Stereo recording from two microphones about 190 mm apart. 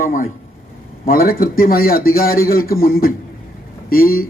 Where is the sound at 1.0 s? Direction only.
50° left (ahead or behind).